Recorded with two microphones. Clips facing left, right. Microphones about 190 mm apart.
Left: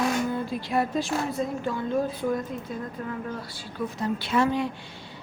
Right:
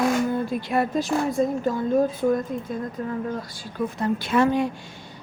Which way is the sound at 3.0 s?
30° right (ahead or behind).